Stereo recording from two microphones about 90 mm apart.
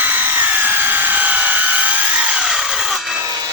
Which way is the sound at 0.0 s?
20° right (ahead or behind).